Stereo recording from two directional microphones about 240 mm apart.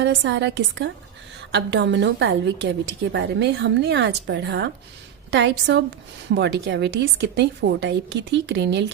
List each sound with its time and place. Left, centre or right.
0.0 s a woman's voice: right